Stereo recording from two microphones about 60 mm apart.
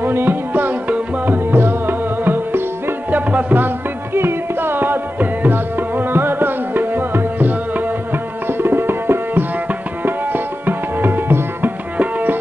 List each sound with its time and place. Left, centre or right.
0.0 s music: right
8.5 s tabla: right
12.0 s music: right